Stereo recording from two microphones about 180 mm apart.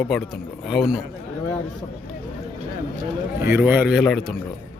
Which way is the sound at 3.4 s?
10° right (ahead or behind).